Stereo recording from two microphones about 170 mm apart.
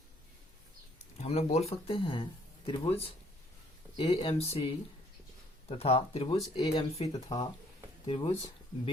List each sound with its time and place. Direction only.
1.1 s speech: 40° left (ahead or behind)
5.6 s speech: 35° left (ahead or behind)